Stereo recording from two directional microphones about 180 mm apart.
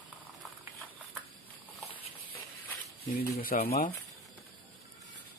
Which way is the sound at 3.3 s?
55° left (ahead or behind).